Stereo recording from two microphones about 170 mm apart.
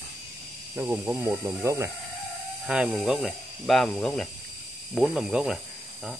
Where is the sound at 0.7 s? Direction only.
10° right (ahead or behind).